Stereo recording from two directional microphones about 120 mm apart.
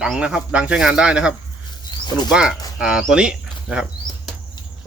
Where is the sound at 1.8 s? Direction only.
35° left (ahead or behind).